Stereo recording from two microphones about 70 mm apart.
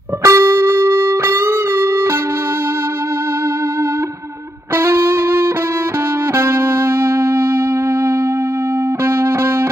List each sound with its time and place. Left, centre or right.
0.2 s music: right
4.7 s music: right
9.0 s music: right